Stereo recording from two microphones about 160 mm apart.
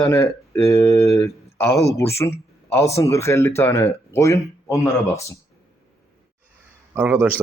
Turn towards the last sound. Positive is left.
turn(degrees=-10)  # may be behind; listen again after turning